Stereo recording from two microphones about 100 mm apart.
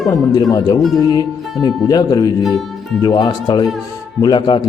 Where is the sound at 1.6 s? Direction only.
40° left (ahead or behind).